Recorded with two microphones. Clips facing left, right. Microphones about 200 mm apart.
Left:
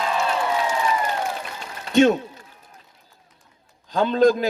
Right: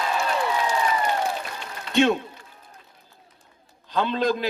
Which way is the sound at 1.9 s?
45° left (ahead or behind).